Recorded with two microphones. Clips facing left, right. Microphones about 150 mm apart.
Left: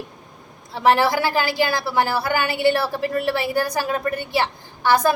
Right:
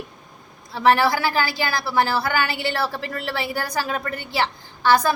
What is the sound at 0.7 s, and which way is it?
A woman's voice, 20° left (ahead or behind).